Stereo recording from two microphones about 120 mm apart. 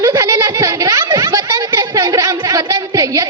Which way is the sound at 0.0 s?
25° right (ahead or behind).